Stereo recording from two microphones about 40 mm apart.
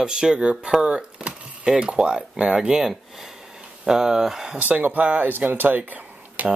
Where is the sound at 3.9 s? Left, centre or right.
Centre.